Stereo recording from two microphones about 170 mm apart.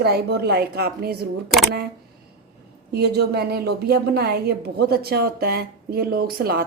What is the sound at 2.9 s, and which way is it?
A woman's voice, 70° right (ahead or behind).